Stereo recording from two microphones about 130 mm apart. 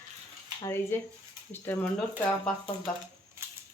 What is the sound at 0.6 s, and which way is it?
Speech, 20° left (ahead or behind).